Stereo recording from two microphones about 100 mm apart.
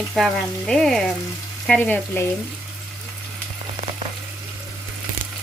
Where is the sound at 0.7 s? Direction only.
5° left (ahead or behind).